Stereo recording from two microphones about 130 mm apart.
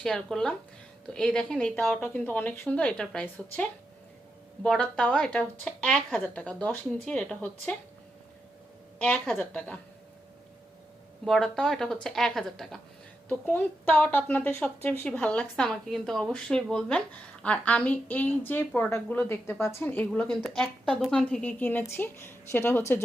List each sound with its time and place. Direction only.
0.0 s a woman's voice: 5° left (ahead or behind)
9.0 s a woman's voice: 10° left (ahead or behind)
11.3 s a woman's voice: 5° left (ahead or behind)
13.2 s a woman's voice: 15° left (ahead or behind)